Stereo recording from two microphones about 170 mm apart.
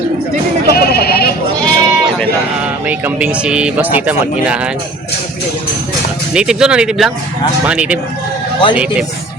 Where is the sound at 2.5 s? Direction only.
10° right (ahead or behind).